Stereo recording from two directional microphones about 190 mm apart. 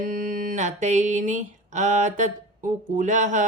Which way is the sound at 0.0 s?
40° right (ahead or behind).